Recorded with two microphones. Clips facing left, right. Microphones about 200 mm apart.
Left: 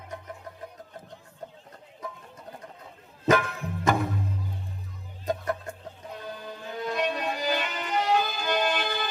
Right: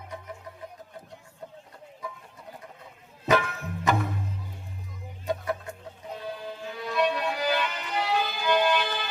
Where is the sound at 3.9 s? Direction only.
45° left (ahead or behind).